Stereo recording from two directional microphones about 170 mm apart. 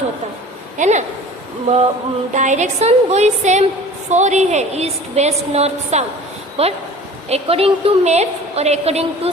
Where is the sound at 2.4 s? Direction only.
45° right (ahead or behind).